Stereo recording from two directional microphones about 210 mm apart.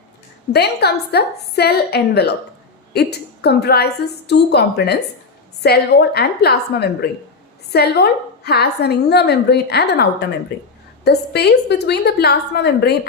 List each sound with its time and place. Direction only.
0.5 s a woman's voice: 50° left (ahead or behind)